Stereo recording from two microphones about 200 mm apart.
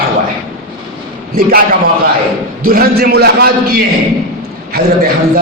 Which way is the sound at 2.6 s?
45° right (ahead or behind).